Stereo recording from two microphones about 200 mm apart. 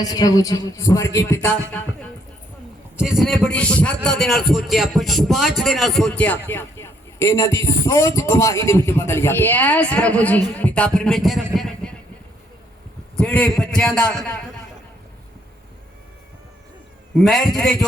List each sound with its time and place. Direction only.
0.0 s a man's voice: 20° left (ahead or behind)
3.0 s a man's voice: centre (ahead or behind)
13.1 s speech: 5° left (ahead or behind)
17.2 s speech: centre (ahead or behind)